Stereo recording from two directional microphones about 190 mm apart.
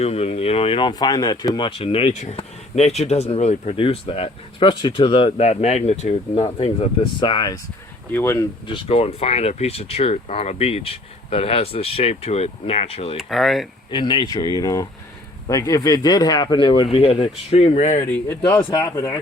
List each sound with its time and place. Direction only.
0.0 s speech: 35° left (ahead or behind); by 8.4 s 15° left (ahead or behind)
8.6 s speech: 30° left (ahead or behind)
13.1 s speech: centre (ahead or behind)
13.9 s speech: 25° left (ahead or behind)
18.4 s speech: 20° left (ahead or behind)